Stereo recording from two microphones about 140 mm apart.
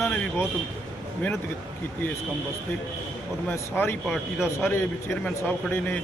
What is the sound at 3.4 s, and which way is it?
Speech, 15° left (ahead or behind).